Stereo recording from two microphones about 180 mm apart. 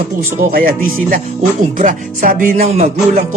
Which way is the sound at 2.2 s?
50° right (ahead or behind).